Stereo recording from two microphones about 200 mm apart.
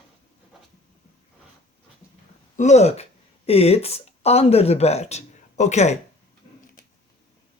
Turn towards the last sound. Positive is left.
turn(degrees=35)  # may be behind; listen again after turning